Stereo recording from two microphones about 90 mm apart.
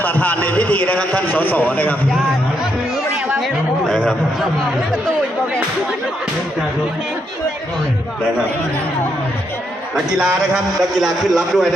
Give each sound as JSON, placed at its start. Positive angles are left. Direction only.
{"t": 0.0, "sound": "a man's voice", "side_deg": 20}
{"t": 3.3, "sound": "chatter", "side_deg": 0}
{"t": 9.9, "sound": "a man's voice", "side_deg": -15}
{"t": 10.8, "sound": "a man's voice", "side_deg": 0}